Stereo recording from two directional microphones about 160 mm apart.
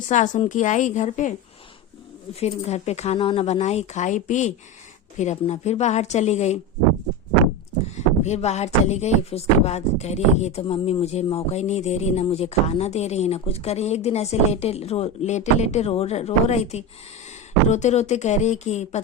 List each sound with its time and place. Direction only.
0.1 s speech: 50° left (ahead or behind)
2.3 s speech: 40° left (ahead or behind)
7.9 s speech: 45° left (ahead or behind)